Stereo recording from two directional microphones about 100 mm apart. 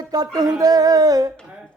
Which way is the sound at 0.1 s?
40° right (ahead or behind).